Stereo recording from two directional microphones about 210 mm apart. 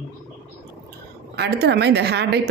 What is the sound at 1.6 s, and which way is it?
Speech, 50° right (ahead or behind).